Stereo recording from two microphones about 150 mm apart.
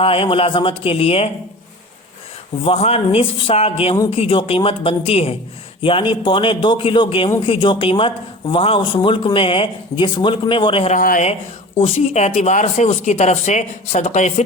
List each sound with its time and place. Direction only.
0.0 s speech: 40° left (ahead or behind)
2.6 s speech: 40° left (ahead or behind)
10.9 s speech: 60° left (ahead or behind)
11.8 s speech: 45° left (ahead or behind)